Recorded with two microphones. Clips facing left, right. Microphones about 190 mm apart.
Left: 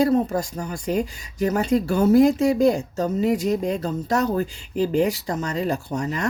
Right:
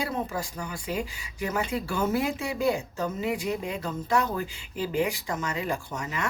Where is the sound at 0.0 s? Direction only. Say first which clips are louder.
Left 11 dB; 40° left (ahead or behind).